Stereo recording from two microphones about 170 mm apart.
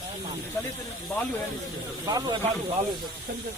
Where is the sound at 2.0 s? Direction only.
20° right (ahead or behind).